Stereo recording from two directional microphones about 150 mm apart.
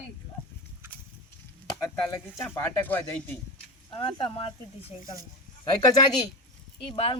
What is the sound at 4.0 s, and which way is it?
Speech, 35° left (ahead or behind).